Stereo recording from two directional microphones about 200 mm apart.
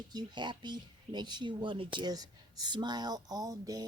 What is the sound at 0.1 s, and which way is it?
Speech, 20° right (ahead or behind).